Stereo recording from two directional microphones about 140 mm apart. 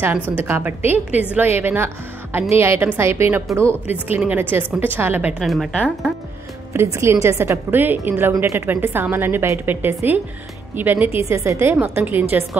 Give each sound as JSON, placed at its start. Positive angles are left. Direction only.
{"t": 0.0, "sound": "a woman's voice", "side_deg": -15}
{"t": 5.4, "sound": "speech", "side_deg": 0}
{"t": 6.7, "sound": "a woman's voice", "side_deg": -20}